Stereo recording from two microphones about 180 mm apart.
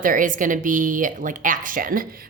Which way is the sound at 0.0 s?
50° right (ahead or behind).